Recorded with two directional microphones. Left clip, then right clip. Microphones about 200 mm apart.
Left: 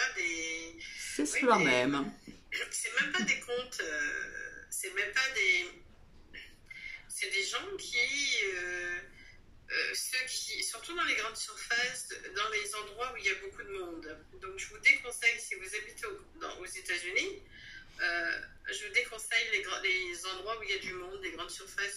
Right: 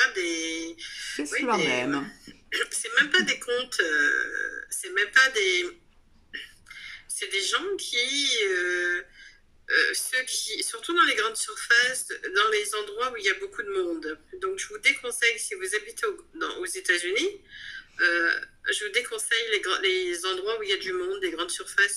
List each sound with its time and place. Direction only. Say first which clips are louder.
0.0 s a sound: right 8 dB; 45° right (ahead or behind)
1.1 s speech: right 1 dB; 5° right (ahead or behind)
2.5 s speech: right 9 dB; 45° right (ahead or behind)
10.1 s speech: right 7 dB; 45° right (ahead or behind)